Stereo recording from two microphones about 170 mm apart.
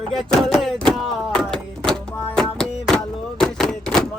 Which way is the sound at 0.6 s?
Centre (ahead or behind).